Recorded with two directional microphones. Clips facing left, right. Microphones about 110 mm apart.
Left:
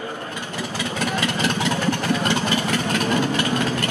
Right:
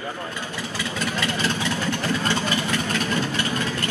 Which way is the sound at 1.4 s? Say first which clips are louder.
Left 3 dB; 15° left (ahead or behind).